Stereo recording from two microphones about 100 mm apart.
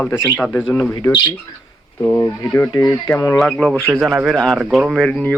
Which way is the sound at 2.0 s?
25° left (ahead or behind).